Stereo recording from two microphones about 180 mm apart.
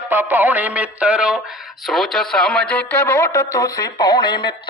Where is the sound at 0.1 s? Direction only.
10° right (ahead or behind).